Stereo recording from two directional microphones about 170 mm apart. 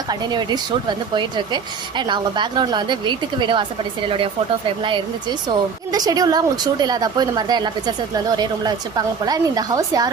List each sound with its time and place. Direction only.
0.1 s speech: 25° right (ahead or behind)
4.8 s speech: 30° right (ahead or behind)